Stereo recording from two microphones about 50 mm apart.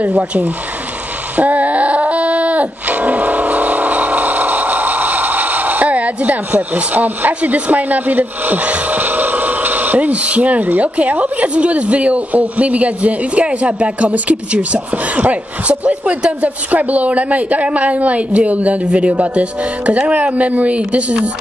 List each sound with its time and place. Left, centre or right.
1.3 s music: right
19.9 s speech: right